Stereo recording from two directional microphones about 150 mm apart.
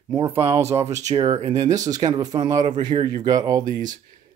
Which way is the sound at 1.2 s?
20° right (ahead or behind).